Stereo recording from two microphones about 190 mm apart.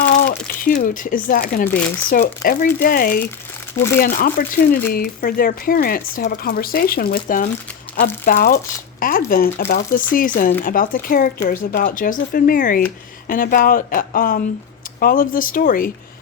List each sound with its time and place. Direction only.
0.3 s speech: 50° left (ahead or behind)
1.6 s speech: 10° left (ahead or behind)
2.0 s speech: 45° left (ahead or behind)
3.8 s speech: 15° left (ahead or behind)
4.0 s speech: 45° left (ahead or behind)